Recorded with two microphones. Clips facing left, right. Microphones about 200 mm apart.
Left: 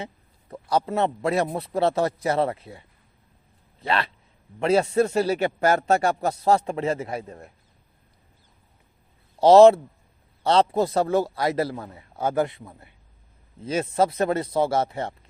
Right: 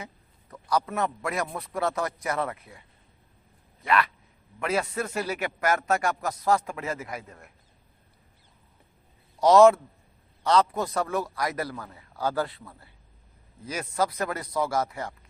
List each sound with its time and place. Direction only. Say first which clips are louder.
0.5 s a man's voice: left 4 dB; 30° left (ahead or behind)
9.4 s a man's voice: left 4 dB; 30° left (ahead or behind)